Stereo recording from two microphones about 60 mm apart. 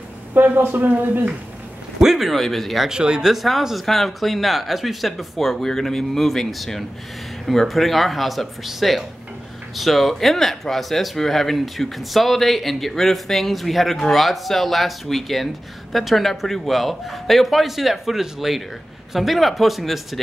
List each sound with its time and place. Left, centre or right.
0.3 s speech: right
2.0 s speech: centre
2.9 s speech: centre